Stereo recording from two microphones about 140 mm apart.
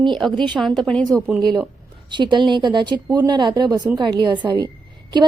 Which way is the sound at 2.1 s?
35° right (ahead or behind).